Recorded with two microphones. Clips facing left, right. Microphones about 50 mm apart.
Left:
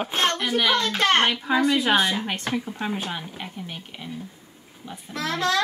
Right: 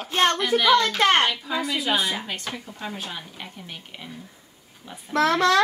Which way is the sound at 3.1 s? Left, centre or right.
Centre.